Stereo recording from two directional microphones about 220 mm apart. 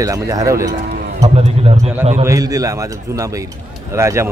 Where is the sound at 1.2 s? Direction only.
30° right (ahead or behind).